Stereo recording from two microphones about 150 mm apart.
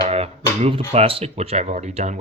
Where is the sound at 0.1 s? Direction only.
45° right (ahead or behind).